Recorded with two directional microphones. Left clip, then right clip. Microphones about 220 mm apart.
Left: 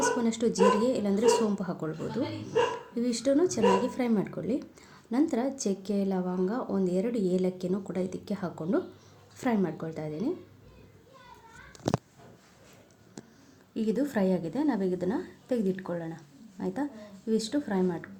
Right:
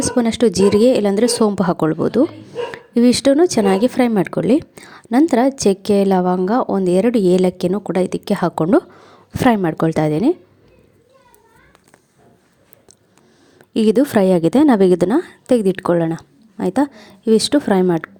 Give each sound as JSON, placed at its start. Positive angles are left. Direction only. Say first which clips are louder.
{"t": 0.0, "sound": "speech", "louder": "right 11 dB", "side_deg": -40}
{"t": 13.7, "sound": "speech", "louder": "right 15 dB", "side_deg": -45}